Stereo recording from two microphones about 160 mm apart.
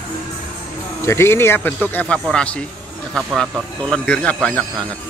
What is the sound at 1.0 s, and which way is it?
Speech, 15° left (ahead or behind).